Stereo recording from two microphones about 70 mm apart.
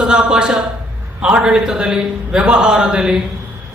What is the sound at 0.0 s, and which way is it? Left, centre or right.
A man's voice, centre.